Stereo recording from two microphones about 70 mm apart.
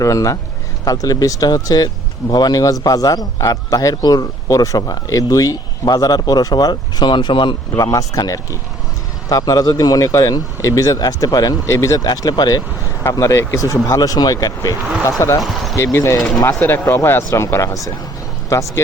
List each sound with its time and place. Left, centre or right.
0.0 s speech: left
2.3 s speech: left
7.8 s speech: left
11.6 s speech: left
11.9 s speech: left
13.0 s speech: left
15.4 s speech: centre
15.7 s speech: left
16.0 s speech: left